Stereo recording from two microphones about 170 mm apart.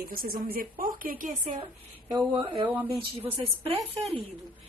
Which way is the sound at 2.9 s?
35° right (ahead or behind).